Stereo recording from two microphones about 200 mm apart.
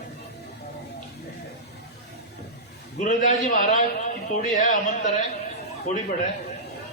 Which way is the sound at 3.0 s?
40° left (ahead or behind).